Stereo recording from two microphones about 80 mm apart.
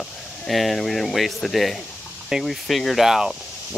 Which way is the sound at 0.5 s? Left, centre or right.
Centre.